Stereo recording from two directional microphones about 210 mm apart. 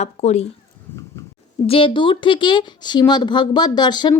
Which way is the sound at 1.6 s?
25° left (ahead or behind).